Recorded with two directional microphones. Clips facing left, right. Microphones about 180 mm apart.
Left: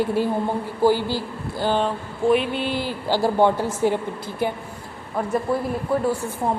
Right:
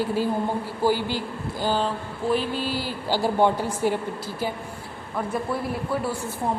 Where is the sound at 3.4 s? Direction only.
10° right (ahead or behind).